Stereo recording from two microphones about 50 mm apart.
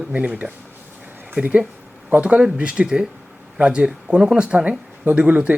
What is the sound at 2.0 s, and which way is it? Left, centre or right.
Speech, right.